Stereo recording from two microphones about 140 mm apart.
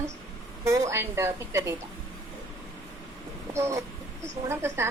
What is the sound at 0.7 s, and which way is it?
Speech, 20° right (ahead or behind).